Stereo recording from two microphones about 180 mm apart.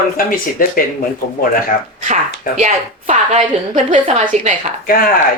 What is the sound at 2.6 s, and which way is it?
Speech, 45° right (ahead or behind).